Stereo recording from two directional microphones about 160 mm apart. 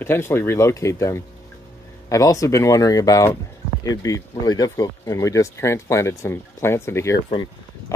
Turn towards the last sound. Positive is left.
turn(degrees=15)  # may be behind; listen again after turning